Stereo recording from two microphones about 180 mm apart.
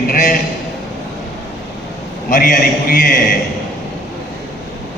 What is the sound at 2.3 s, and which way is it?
Speech, 50° left (ahead or behind).